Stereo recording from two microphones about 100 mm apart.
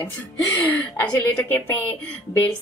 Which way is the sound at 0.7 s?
20° left (ahead or behind).